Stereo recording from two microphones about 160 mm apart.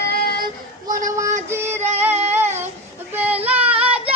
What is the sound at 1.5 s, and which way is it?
Female singing, 15° right (ahead or behind).